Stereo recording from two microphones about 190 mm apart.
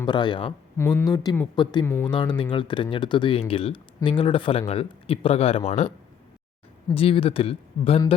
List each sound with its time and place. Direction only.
0.0 s speech: 25° left (ahead or behind)